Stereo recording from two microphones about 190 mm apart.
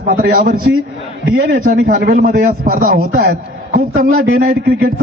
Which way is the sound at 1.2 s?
65° right (ahead or behind).